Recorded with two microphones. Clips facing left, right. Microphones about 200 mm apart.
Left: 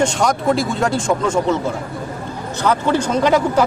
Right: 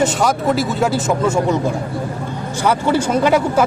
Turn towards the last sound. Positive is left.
turn(degrees=-5)  # may be behind; listen again after turning